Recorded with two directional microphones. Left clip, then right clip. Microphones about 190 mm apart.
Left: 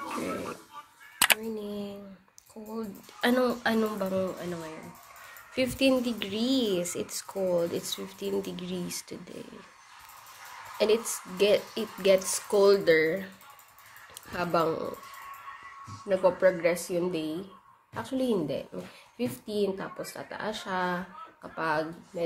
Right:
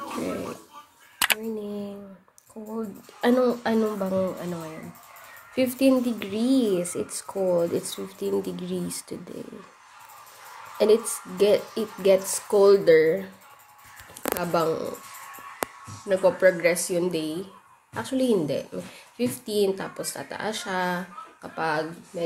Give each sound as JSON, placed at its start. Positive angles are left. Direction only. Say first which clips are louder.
{"t": 0.0, "sound": "pig", "louder": "right 3 dB", "side_deg": -5}
{"t": 1.2, "sound": "a sound", "louder": "right 1 dB", "side_deg": -5}
{"t": 2.7, "sound": "speech", "louder": "right 4 dB", "side_deg": -10}
{"t": 10.8, "sound": "speech", "louder": "right 5 dB", "side_deg": -15}
{"t": 14.4, "sound": "speech", "louder": "right 2 dB", "side_deg": 0}
{"t": 16.1, "sound": "speech", "louder": "right 4 dB", "side_deg": -5}